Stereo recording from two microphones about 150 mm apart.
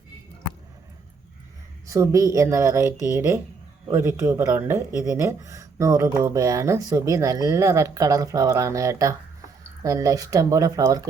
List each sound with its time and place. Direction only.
1.9 s speech: 20° right (ahead or behind)